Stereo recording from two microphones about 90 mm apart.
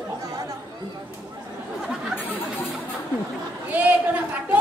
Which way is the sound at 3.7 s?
15° right (ahead or behind).